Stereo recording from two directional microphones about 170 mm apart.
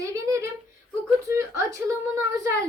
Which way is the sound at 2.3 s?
20° right (ahead or behind).